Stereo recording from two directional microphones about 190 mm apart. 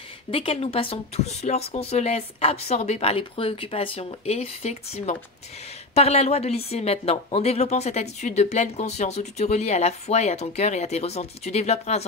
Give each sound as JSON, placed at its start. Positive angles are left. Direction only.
{"t": 0.3, "sound": "a woman's voice", "side_deg": 30}